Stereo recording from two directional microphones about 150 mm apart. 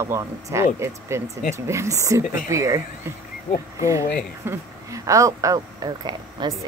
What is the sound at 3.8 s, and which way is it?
Speech, 20° right (ahead or behind).